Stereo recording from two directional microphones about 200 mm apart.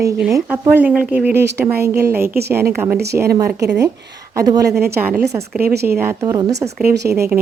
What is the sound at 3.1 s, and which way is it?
A woman's voice, 15° right (ahead or behind).